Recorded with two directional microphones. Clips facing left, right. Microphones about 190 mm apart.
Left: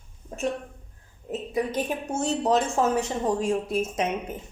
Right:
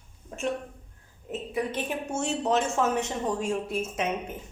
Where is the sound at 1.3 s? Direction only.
35° left (ahead or behind).